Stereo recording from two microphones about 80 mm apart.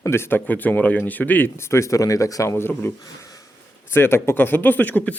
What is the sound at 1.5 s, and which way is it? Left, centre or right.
Speech, left.